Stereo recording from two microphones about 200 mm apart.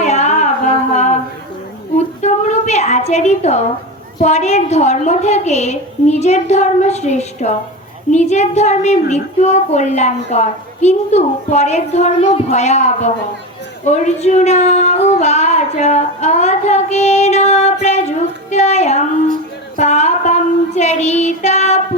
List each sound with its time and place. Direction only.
0.0 s music: 35° left (ahead or behind)
0.9 s a sound: 35° left (ahead or behind)
4.2 s a woman's voice: 35° left (ahead or behind)